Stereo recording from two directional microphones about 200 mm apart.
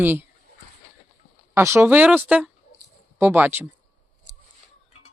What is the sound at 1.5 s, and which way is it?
Speech, 10° right (ahead or behind).